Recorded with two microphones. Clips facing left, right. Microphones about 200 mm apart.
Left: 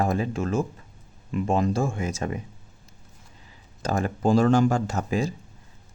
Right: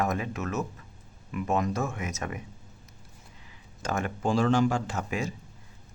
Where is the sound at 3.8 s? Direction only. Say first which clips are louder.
Left 5 dB; 35° left (ahead or behind).